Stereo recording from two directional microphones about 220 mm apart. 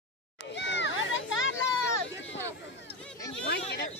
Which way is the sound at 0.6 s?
55° left (ahead or behind).